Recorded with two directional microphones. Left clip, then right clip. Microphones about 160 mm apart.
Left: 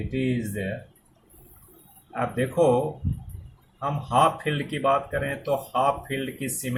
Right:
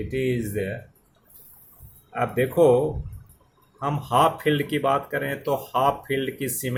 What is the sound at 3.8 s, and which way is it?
Speech, 60° right (ahead or behind).